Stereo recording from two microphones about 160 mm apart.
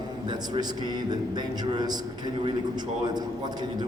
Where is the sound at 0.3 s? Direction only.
25° right (ahead or behind).